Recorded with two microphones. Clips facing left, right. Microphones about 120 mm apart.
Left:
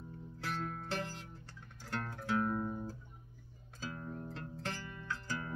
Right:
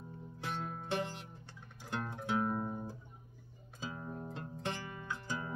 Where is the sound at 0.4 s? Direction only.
20° right (ahead or behind).